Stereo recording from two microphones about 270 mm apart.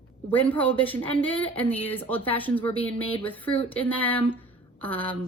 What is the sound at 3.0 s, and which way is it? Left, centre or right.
Speech, centre.